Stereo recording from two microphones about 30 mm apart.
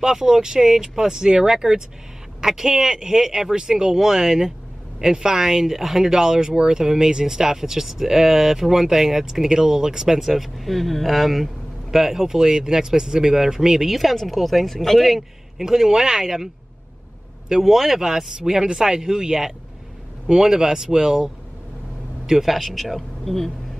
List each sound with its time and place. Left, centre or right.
0.0 s speech: centre
10.2 s speech: centre
13.8 s a man's voice: centre
15.6 s speech: centre
17.5 s speech: centre
22.4 s a man's voice: centre